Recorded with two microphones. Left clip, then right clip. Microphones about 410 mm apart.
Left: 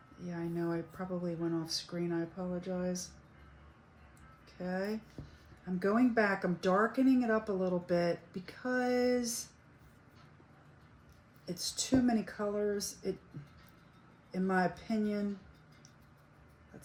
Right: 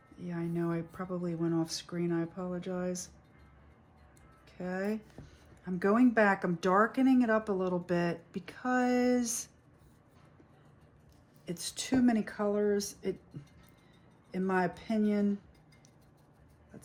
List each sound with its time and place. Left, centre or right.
0.3 s speech: right
4.6 s speech: right
11.4 s speech: right
14.3 s speech: right